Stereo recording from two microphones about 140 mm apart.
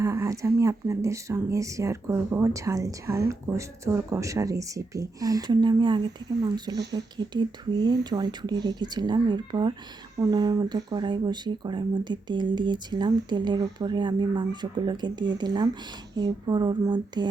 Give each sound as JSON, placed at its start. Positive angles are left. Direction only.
{"t": 0.0, "sound": "speech", "side_deg": -20}